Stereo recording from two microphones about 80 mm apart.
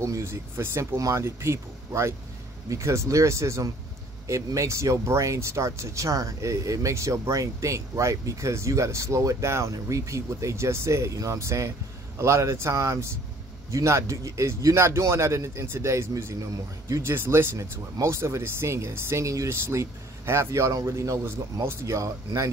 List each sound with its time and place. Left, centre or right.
0.0 s speech: right